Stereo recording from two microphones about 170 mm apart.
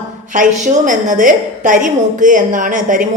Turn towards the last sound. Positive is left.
turn(degrees=-50)  # may be behind; listen again after turning